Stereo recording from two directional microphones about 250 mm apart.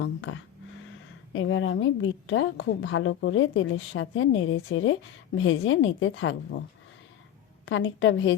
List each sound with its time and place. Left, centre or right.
0.0 s a woman's voice: left
7.6 s a woman's voice: left